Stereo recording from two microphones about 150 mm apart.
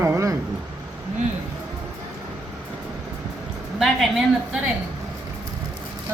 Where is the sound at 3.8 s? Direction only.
Centre (ahead or behind).